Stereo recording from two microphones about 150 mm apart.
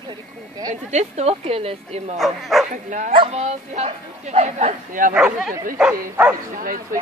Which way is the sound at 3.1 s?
40° right (ahead or behind).